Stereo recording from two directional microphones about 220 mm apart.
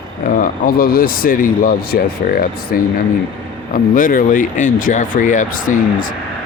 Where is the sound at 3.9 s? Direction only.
40° left (ahead or behind).